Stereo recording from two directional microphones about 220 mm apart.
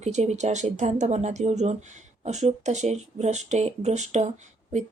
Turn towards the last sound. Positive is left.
turn(degrees=-30)  # may be behind; listen again after turning